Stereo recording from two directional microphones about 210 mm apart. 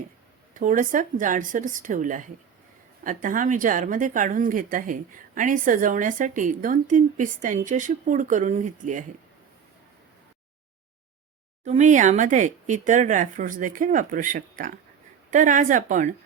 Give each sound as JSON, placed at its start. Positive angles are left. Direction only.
{"t": 0.5, "sound": "speech", "side_deg": -40}
{"t": 11.6, "sound": "speech", "side_deg": -35}